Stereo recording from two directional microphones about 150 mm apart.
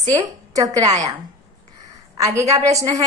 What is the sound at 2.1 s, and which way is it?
Speech, 20° right (ahead or behind).